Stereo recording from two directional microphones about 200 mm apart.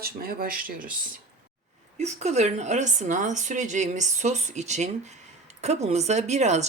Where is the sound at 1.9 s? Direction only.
35° right (ahead or behind).